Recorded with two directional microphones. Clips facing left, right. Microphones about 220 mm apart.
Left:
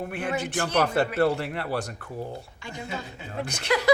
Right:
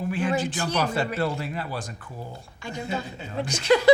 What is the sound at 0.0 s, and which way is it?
Speech, 60° left (ahead or behind).